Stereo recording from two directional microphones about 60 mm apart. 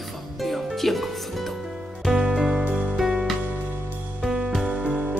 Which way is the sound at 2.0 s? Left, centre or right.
Centre.